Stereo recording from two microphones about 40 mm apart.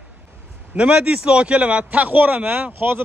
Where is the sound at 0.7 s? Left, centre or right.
Right.